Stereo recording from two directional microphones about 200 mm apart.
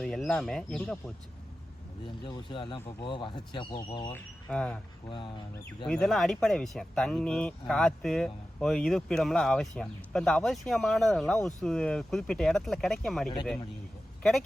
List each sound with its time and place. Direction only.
0.0 s speech: centre (ahead or behind)
2.0 s speech: 25° left (ahead or behind)
4.1 s speech: 5° left (ahead or behind)
5.8 s speech: centre (ahead or behind)